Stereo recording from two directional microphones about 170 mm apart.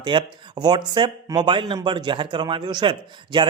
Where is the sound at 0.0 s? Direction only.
25° right (ahead or behind).